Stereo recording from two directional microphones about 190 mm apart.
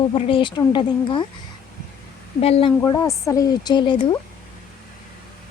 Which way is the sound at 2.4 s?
30° left (ahead or behind).